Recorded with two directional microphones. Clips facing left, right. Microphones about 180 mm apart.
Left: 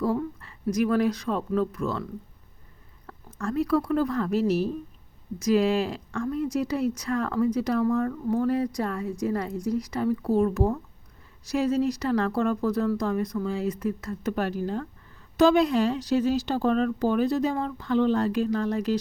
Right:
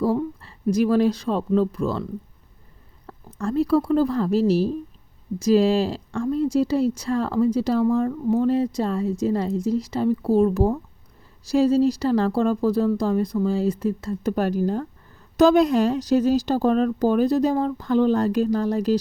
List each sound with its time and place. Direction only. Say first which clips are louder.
0.4 s a woman's voice: right 5 dB; 30° right (ahead or behind)
3.1 s a woman's voice: right 4 dB; 35° right (ahead or behind)